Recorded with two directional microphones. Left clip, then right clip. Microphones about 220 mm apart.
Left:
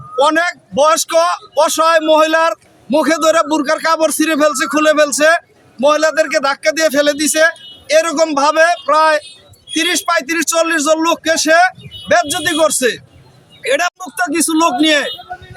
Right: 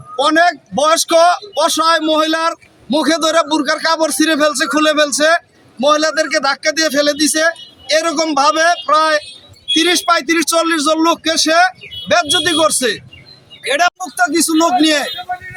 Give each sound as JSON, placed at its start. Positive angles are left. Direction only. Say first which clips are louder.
{"t": 0.2, "sound": "a man's voice", "louder": "right 1 dB", "side_deg": 10}